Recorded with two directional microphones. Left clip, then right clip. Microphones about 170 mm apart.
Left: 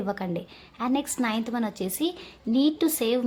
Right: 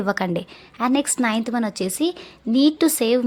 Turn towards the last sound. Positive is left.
turn(degrees=-30)  # may be behind; listen again after turning